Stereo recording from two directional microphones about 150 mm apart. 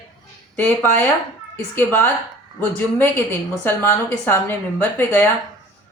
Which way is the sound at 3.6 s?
15° left (ahead or behind).